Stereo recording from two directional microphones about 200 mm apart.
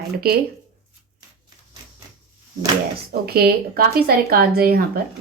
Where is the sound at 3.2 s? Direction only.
50° right (ahead or behind).